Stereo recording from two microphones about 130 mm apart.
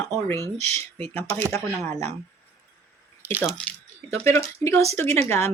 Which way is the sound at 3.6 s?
15° left (ahead or behind).